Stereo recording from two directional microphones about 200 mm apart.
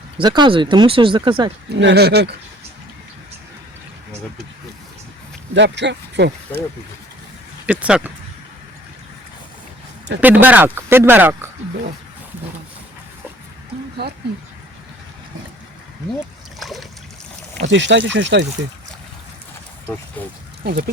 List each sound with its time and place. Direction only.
0.2 s speech: 25° right (ahead or behind)
1.7 s speech: 60° right (ahead or behind)
5.5 s speech: 60° right (ahead or behind)
7.7 s speech: 5° right (ahead or behind)
10.2 s speech: 10° right (ahead or behind)
14.0 s speech: 55° right (ahead or behind)
16.6 s boat: centre (ahead or behind)
17.7 s speech: 65° right (ahead or behind)
20.7 s speech: 50° right (ahead or behind)